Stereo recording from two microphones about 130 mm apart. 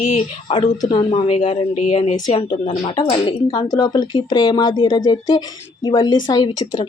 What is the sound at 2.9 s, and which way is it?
Speech, 35° left (ahead or behind).